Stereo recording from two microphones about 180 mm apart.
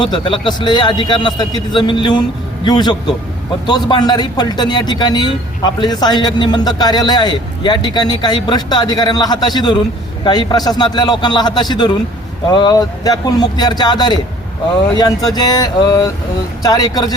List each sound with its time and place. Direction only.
0.0 s a man's voice: 25° left (ahead or behind)